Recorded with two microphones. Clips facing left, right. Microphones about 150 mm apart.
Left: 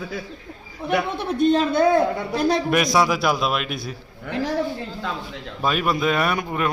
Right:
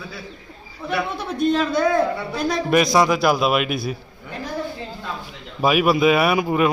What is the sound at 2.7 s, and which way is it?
A man's voice, centre (ahead or behind).